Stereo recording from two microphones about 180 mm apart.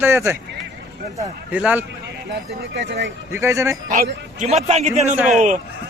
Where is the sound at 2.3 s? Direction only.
75° right (ahead or behind).